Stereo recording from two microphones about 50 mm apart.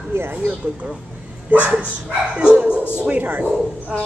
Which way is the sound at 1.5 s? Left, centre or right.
Right.